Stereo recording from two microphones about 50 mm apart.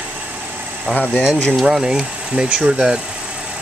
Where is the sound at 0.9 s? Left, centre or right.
Left.